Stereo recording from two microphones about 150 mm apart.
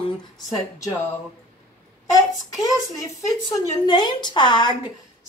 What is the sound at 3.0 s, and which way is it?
A woman's voice, 20° left (ahead or behind).